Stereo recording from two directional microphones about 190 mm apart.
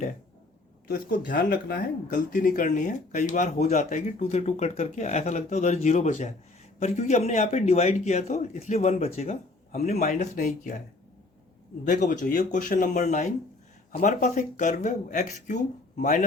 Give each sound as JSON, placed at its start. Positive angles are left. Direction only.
{"t": 0.9, "sound": "speech", "side_deg": 50}
{"t": 11.9, "sound": "speech", "side_deg": 40}